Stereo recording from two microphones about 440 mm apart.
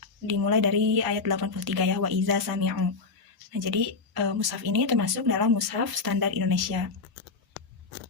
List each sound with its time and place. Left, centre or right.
0.0 s a woman's voice: right